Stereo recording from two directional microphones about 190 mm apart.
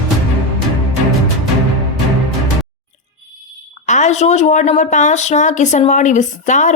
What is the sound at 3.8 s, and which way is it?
Speech, 40° left (ahead or behind).